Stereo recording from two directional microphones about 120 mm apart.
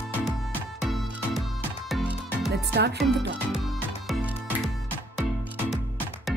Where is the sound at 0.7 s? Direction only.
Centre (ahead or behind).